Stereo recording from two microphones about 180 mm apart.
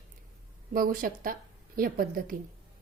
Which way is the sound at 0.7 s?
50° right (ahead or behind).